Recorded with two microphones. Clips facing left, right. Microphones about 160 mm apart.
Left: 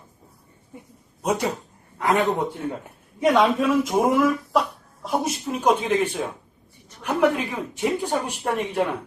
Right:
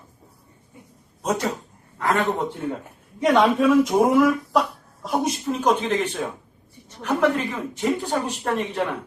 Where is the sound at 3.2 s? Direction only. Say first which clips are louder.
Right 1 dB; centre (ahead or behind).